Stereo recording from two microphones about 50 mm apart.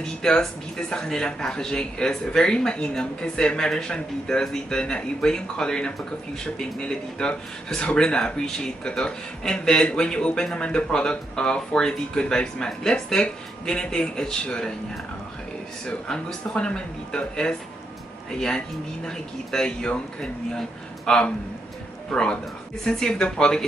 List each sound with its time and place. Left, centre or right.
0.0 s a man's voice: centre
16.5 s a man's voice: centre